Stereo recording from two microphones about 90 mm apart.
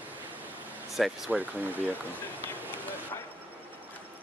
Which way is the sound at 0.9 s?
Centre (ahead or behind).